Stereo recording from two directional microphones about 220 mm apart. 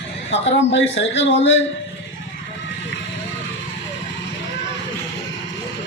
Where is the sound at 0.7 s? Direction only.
55° left (ahead or behind).